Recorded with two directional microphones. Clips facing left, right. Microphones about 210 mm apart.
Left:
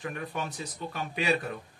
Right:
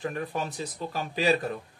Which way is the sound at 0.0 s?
35° right (ahead or behind).